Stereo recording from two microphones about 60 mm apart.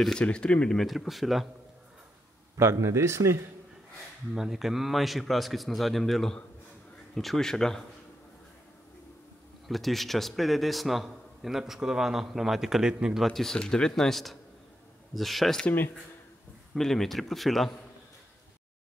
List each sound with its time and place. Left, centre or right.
0.2 s speech: centre
0.7 s a man's voice: centre
2.5 s a man's voice: right
4.3 s a man's voice: centre
9.7 s a man's voice: centre
13.2 s a man's voice: centre
16.7 s a man's voice: centre